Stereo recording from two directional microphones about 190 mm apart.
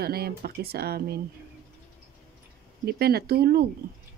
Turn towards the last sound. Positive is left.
turn(degrees=-55)  # may be behind; listen again after turning